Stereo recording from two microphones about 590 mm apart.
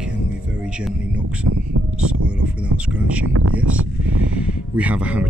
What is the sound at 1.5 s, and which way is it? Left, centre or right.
Speech, right.